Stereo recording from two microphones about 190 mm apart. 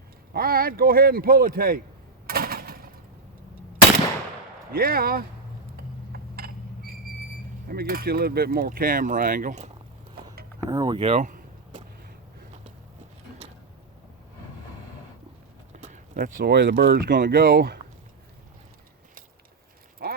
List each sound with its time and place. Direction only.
0.3 s speech: 50° right (ahead or behind)
2.2 s a sound: 50° right (ahead or behind)
4.7 s speech: 50° right (ahead or behind)
6.1 s a sound: 55° right (ahead or behind)
7.7 s speech: 50° right (ahead or behind)
10.7 s vehicle: 20° right (ahead or behind); by 11.8 s 45° right (ahead or behind)
15.8 s clip-clop: 40° right (ahead or behind)
16.5 s speech: 65° right (ahead or behind)
20.0 s a sound: 55° right (ahead or behind)